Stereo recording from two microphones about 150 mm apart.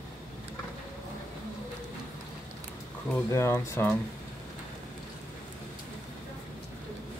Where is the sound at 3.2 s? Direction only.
20° left (ahead or behind).